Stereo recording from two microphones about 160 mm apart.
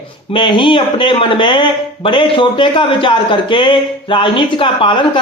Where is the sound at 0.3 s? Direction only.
30° left (ahead or behind).